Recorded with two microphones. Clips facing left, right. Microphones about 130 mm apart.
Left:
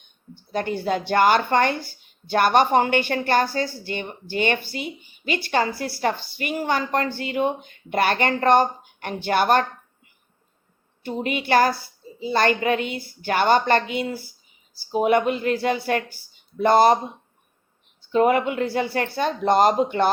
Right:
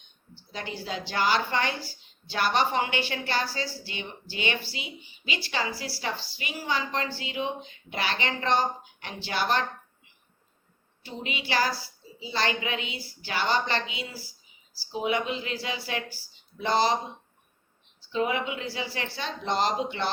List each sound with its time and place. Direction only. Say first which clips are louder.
0.0 s a woman's voice: left 8 dB; 55° left (ahead or behind)
11.0 s a woman's voice: left 9 dB; 55° left (ahead or behind)
18.1 s a woman's voice: left 9 dB; 55° left (ahead or behind)